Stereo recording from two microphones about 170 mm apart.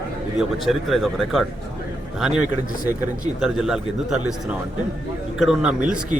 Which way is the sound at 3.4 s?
5° right (ahead or behind).